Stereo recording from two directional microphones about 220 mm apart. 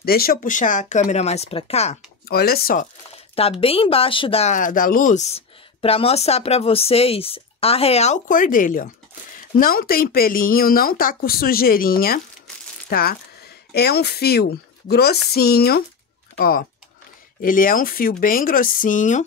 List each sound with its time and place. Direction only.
0.0 s speech: 45° left (ahead or behind)
2.2 s speech: 45° left (ahead or behind)
3.6 s speech: 25° left (ahead or behind)